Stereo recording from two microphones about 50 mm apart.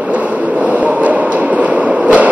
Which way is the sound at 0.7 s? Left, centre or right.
Right.